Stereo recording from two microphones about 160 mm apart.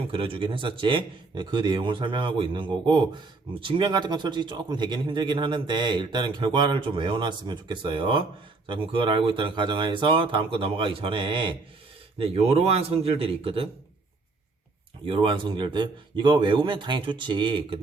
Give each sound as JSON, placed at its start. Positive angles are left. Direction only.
{"t": 0.1, "sound": "speech", "side_deg": -35}
{"t": 15.0, "sound": "speech", "side_deg": -30}